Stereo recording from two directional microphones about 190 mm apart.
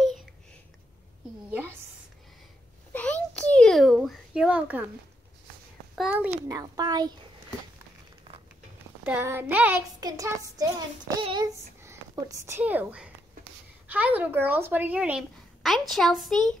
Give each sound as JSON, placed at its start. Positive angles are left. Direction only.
{"t": 0.0, "sound": "a sound", "side_deg": 0}
{"t": 1.5, "sound": "a woman's voice", "side_deg": -10}
{"t": 2.9, "sound": "a sound", "side_deg": 5}
{"t": 5.9, "sound": "a woman's voice", "side_deg": -10}
{"t": 6.6, "sound": "a child's voice", "side_deg": -20}
{"t": 9.0, "sound": "a woman's voice", "side_deg": -10}